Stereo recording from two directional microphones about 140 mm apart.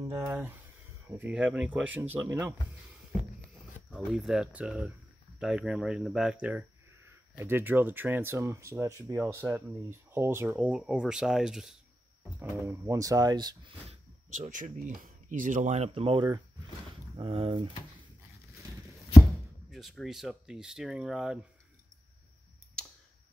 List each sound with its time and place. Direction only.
1.0 s speech: 15° right (ahead or behind)
3.9 s speech: 5° right (ahead or behind)
12.6 s speech: 20° right (ahead or behind)
13.8 s a sound: 50° right (ahead or behind)
14.5 s speech: 80° right; by 17.6 s 40° right (ahead or behind)
19.7 s speech: centre (ahead or behind)
22.8 s tick: 5° left (ahead or behind)